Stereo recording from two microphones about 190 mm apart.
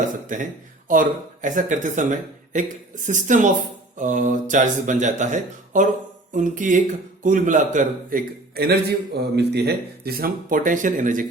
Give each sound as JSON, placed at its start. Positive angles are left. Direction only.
{"t": 0.9, "sound": "a man's voice", "side_deg": -40}